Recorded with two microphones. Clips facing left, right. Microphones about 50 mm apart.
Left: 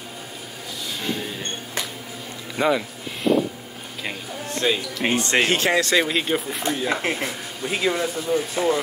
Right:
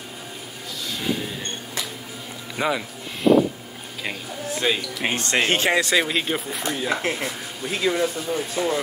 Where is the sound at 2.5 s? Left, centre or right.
Centre.